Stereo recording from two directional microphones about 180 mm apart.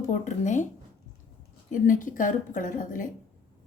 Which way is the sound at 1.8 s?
45° left (ahead or behind).